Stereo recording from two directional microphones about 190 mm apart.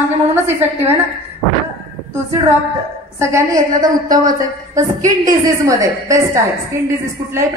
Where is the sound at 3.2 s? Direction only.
15° right (ahead or behind).